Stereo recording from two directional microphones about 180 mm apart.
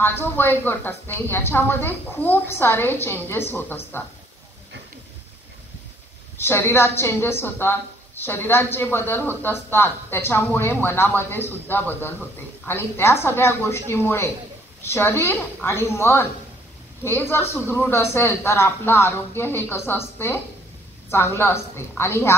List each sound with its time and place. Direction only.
0.0 s a woman's voice: 10° left (ahead or behind)
6.3 s a woman's voice: 15° left (ahead or behind)